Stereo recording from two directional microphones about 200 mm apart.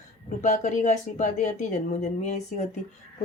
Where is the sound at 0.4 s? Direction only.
40° left (ahead or behind).